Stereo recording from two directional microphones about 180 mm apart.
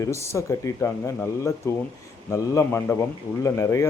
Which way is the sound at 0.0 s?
15° left (ahead or behind).